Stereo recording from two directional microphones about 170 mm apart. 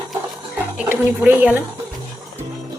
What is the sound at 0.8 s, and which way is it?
Speech, 10° right (ahead or behind).